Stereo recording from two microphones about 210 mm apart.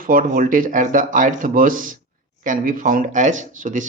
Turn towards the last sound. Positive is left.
turn(degrees=-40)  # may be behind; listen again after turning